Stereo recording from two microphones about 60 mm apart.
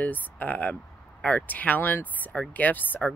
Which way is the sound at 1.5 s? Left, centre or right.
Left.